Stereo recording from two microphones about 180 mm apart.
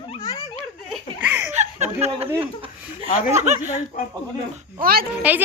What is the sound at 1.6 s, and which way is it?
Chuckle, 40° right (ahead or behind).